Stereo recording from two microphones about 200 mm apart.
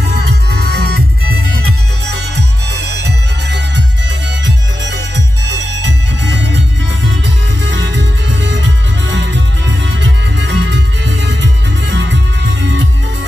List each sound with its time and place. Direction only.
0.1 s music: 55° right (ahead or behind)
3.0 s music: 60° right (ahead or behind)
5.5 s music: 65° right (ahead or behind)